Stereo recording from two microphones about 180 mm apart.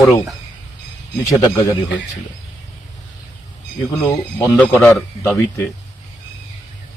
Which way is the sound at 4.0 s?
10° left (ahead or behind).